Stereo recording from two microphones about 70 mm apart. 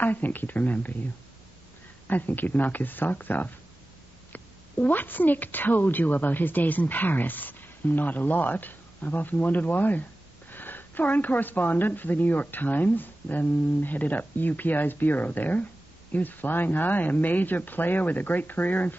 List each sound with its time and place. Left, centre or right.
0.0 s a woman's voice: left
2.0 s a woman's voice: left